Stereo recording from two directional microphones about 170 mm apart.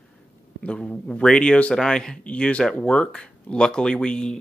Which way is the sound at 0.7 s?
5° left (ahead or behind).